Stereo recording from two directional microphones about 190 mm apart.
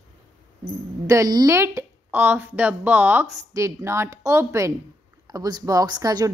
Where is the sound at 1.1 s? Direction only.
20° right (ahead or behind).